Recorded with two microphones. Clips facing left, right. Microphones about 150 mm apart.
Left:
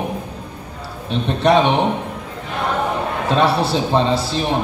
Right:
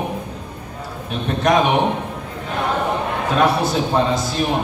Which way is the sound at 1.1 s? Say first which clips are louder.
Left 2 dB; 30° left (ahead or behind).